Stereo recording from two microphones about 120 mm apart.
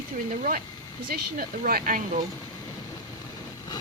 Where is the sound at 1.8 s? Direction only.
90° right.